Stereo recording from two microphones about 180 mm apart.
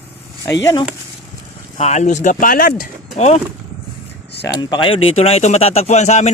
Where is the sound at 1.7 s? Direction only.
40° left (ahead or behind).